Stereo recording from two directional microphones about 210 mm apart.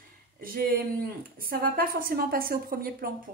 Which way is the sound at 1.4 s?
45° right (ahead or behind).